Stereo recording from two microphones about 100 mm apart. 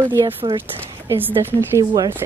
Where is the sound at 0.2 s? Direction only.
65° right (ahead or behind).